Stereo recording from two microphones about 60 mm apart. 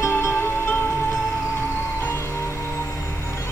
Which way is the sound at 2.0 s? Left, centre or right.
Left.